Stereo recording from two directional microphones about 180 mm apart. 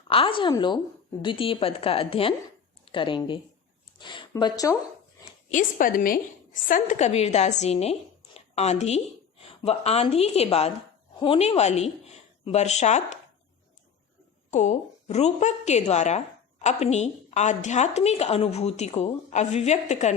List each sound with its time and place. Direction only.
0.1 s a woman's voice: 30° left (ahead or behind)
5.5 s a woman's voice: 45° left (ahead or behind)
14.5 s a woman's voice: 40° left (ahead or behind)